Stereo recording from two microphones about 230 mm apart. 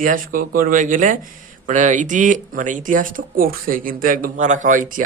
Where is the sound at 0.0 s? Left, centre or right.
Right.